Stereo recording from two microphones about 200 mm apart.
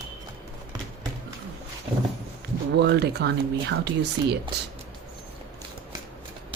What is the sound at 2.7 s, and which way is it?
Speech, 55° right (ahead or behind).